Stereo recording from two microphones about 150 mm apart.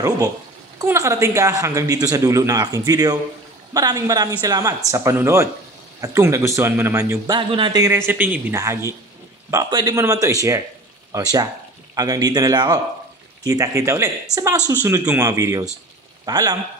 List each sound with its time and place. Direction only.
0.8 s speech: 20° right (ahead or behind)
7.3 s speech: 35° right (ahead or behind)
8.1 s speech: 10° right (ahead or behind)